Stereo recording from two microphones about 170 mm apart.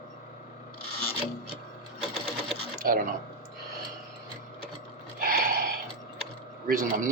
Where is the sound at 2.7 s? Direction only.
55° right (ahead or behind).